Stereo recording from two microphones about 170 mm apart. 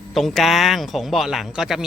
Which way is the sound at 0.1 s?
Centre (ahead or behind).